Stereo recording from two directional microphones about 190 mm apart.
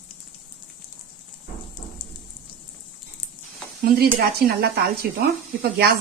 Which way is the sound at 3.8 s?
55° right (ahead or behind).